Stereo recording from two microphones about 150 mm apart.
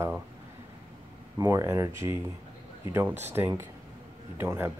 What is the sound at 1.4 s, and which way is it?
Speech, 20° right (ahead or behind).